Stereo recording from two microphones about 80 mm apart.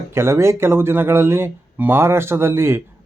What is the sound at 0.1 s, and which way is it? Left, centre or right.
Speech, right.